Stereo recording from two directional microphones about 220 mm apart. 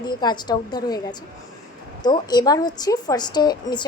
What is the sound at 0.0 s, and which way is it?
A woman's voice, 20° left (ahead or behind).